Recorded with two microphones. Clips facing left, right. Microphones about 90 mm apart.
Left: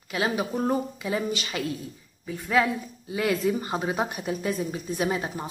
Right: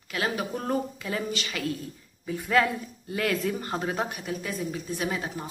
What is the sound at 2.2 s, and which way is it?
Speech, centre (ahead or behind).